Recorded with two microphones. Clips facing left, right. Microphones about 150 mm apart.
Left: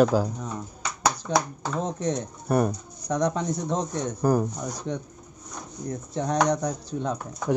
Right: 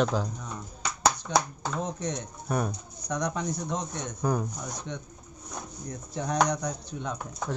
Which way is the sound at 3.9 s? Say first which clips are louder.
Left 8 dB; 5° left (ahead or behind).